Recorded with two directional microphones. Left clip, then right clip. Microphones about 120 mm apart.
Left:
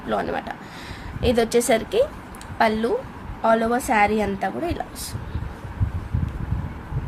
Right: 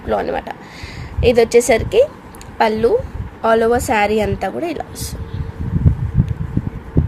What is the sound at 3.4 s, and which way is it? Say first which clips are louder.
A woman's voice: right 6 dB; 50° right (ahead or behind).